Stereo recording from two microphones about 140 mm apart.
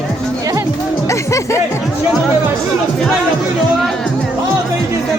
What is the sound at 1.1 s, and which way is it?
Music, 20° left (ahead or behind).